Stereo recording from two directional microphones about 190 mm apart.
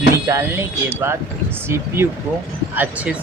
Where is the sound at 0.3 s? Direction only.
15° right (ahead or behind).